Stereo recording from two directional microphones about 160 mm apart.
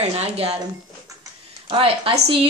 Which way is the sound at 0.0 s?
40° right (ahead or behind).